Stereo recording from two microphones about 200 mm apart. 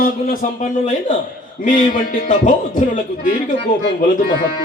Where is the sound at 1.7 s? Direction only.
40° left (ahead or behind).